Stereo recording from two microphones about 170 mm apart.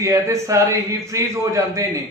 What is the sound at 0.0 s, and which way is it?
A man's voice, 20° right (ahead or behind).